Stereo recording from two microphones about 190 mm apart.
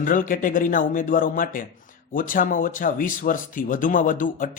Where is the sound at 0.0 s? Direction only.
45° left (ahead or behind).